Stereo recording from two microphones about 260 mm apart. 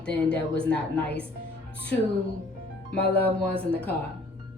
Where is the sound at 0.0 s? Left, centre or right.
Centre.